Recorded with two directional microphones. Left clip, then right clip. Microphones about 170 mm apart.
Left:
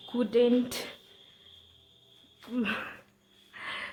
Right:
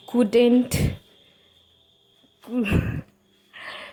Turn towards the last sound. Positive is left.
turn(degrees=-15)  # may be behind; listen again after turning